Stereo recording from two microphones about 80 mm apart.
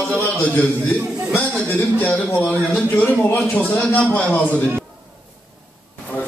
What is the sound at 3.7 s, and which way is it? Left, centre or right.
Speech, centre.